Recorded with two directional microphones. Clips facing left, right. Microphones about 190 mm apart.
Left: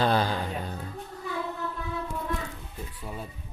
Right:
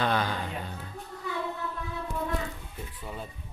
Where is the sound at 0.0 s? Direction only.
30° left (ahead or behind).